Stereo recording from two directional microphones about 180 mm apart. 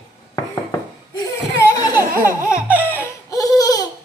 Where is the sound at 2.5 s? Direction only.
15° left (ahead or behind).